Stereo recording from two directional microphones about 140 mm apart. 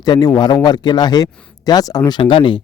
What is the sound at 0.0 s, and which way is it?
Speech, 30° left (ahead or behind).